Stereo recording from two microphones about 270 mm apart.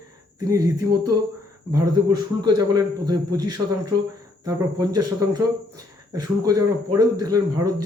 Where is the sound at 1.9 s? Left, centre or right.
Right.